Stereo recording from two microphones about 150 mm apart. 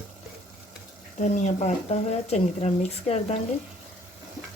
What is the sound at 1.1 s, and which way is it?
Speech, 55° left (ahead or behind).